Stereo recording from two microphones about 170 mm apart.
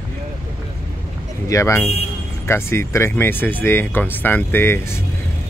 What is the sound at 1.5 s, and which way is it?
Speech, 15° left (ahead or behind).